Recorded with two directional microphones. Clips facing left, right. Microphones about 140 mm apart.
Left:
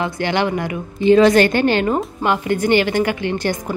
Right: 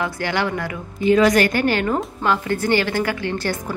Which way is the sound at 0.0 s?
25° left (ahead or behind).